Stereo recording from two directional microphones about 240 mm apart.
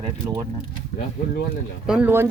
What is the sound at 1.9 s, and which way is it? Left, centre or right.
Speech, centre.